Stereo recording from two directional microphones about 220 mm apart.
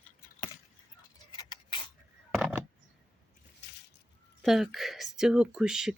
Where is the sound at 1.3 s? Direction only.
20° left (ahead or behind).